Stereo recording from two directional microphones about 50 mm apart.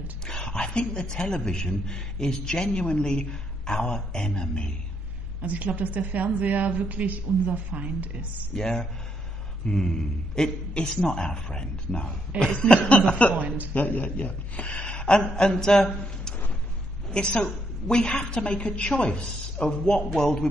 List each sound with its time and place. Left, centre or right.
0.3 s a man's voice: centre
5.4 s a woman's voice: right
8.5 s a woman's voice: centre
12.9 s a woman's voice: left
14.8 s a woman's voice: centre